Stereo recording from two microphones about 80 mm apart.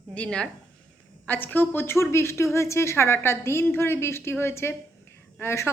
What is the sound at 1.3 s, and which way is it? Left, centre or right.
A woman's voice, left.